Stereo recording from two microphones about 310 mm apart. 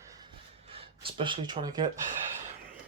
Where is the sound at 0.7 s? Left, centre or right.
Centre.